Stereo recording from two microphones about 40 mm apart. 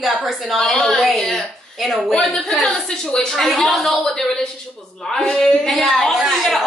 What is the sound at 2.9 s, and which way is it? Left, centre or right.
A woman's voice, centre.